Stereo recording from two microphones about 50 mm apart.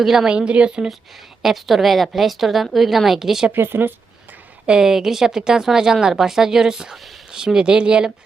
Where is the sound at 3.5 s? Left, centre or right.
Right.